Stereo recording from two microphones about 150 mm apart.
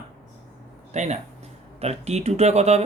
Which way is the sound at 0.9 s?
50° right (ahead or behind).